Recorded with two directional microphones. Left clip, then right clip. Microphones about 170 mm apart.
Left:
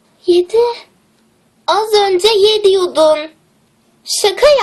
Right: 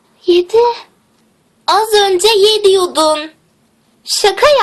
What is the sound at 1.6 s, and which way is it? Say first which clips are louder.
A woman's voice: right 1 dB; 5° right (ahead or behind).